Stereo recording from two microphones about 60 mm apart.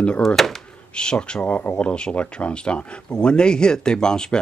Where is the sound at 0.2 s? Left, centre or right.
Centre.